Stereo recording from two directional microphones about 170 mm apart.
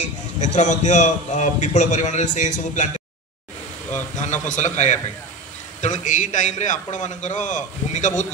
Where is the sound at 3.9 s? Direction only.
45° left (ahead or behind).